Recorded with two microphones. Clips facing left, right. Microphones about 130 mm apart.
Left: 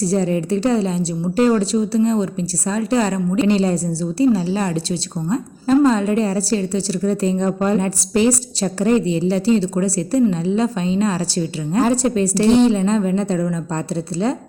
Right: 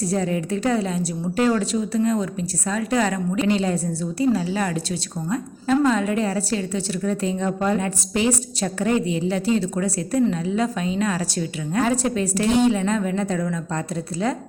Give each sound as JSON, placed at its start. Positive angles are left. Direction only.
{"t": 0.0, "sound": "a woman's voice", "side_deg": 30}